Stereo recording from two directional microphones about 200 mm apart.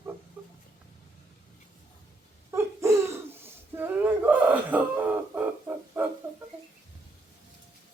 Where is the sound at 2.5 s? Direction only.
15° right (ahead or behind).